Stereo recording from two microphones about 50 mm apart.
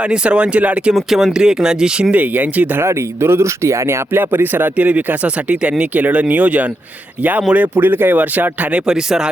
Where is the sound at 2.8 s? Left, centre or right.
Right.